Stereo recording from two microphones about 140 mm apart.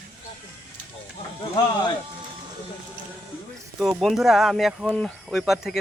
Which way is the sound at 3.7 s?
Centre (ahead or behind).